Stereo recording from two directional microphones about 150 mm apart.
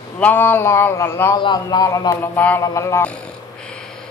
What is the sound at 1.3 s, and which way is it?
A man's voice, 30° left (ahead or behind).